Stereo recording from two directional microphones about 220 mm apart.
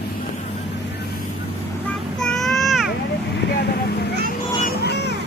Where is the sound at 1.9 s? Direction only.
Centre (ahead or behind).